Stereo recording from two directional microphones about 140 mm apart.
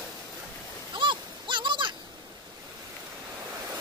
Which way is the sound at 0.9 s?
35° right (ahead or behind).